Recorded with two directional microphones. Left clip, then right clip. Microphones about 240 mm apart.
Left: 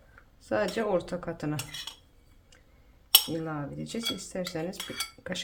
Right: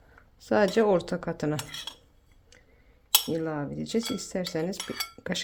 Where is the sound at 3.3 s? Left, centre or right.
Right.